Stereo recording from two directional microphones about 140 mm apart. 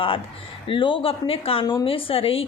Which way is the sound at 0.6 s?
35° left (ahead or behind).